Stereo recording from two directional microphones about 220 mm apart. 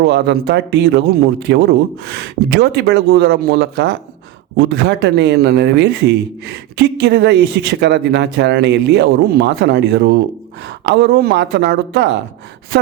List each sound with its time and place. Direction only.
0.0 s a man's voice: 50° right (ahead or behind)